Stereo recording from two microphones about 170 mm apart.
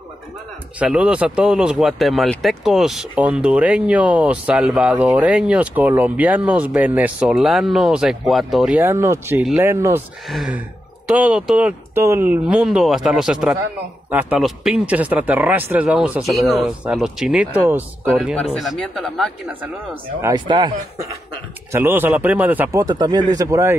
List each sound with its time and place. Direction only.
0.7 s speech: 5° right (ahead or behind)
10.2 s speech: centre (ahead or behind)
18.3 s speech: 5° left (ahead or behind)
19.6 s speech: 15° right (ahead or behind)
21.7 s speech: 15° right (ahead or behind)